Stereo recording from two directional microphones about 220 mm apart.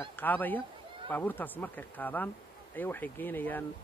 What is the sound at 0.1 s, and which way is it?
Speech, 10° left (ahead or behind).